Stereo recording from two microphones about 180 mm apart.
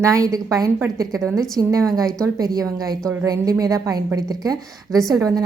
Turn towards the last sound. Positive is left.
turn(degrees=-20)  # may be behind; listen again after turning